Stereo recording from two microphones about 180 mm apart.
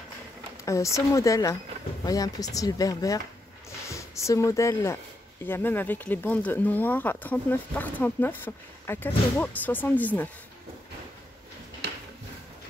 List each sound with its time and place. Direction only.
0.7 s speech: 15° left (ahead or behind)